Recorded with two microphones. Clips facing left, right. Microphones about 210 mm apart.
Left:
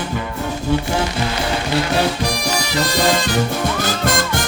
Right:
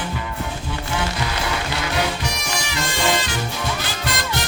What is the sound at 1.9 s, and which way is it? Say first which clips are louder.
Music: left 5 dB; 35° left (ahead or behind).